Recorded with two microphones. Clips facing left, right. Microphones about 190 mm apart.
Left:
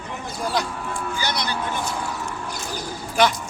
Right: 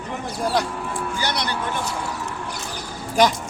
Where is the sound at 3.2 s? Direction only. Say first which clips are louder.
Right 2 dB; 40° right (ahead or behind).